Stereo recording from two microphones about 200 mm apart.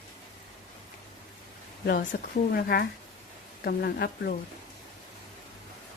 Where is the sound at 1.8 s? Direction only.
55° left (ahead or behind).